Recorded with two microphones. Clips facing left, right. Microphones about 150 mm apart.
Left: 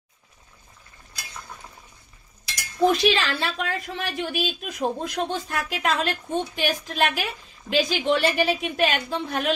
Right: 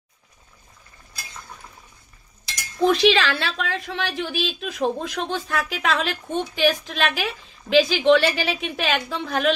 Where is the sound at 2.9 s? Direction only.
90° right.